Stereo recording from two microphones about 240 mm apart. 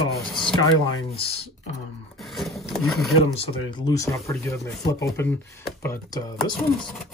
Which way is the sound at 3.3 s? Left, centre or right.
Centre.